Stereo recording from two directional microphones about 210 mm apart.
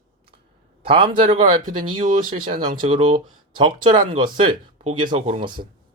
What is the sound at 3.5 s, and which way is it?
Speech, 20° right (ahead or behind).